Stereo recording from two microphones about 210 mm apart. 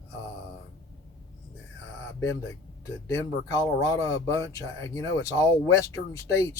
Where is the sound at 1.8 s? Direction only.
70° left (ahead or behind).